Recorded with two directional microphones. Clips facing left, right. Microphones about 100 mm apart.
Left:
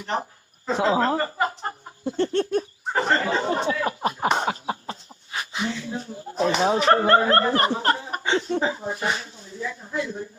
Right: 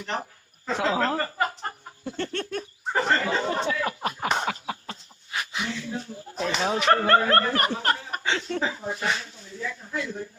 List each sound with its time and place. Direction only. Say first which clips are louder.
0.0 s chuckle: left 4 dB; 25° left (ahead or behind)
8.4 s speech: left 4 dB; 25° left (ahead or behind)